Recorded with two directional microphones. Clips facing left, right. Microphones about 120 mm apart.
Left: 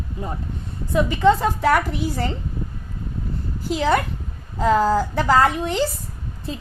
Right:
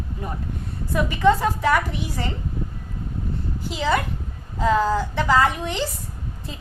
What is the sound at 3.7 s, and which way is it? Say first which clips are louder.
A woman's voice: left 3 dB; 45° left (ahead or behind).